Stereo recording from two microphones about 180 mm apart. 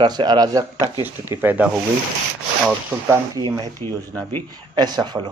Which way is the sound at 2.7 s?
15° right (ahead or behind).